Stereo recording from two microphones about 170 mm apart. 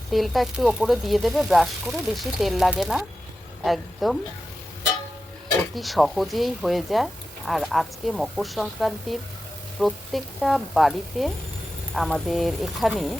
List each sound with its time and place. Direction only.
0.1 s speech: centre (ahead or behind)
5.7 s speech: centre (ahead or behind)